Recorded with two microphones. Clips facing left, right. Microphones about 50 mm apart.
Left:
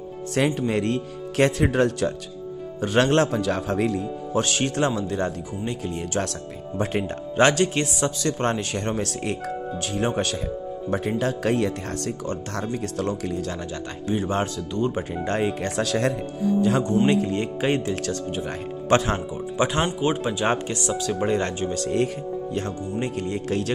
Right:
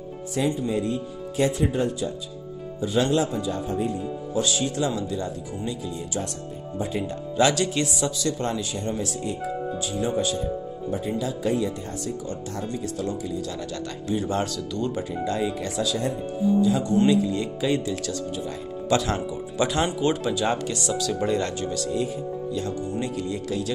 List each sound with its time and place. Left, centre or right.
0.3 s speech: left
2.8 s speech: left
4.3 s speech: left
14.0 s speech: left
15.2 s speech: left
17.0 s speech: left
21.9 s speech: left
22.9 s speech: left